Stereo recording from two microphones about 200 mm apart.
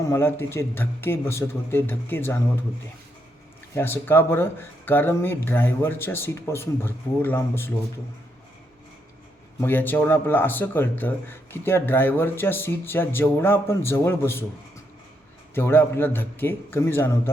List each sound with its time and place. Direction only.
0.1 s speech: 10° left (ahead or behind)
3.8 s speech: 10° left (ahead or behind)
9.6 s speech: 10° left (ahead or behind)
15.5 s speech: 10° left (ahead or behind)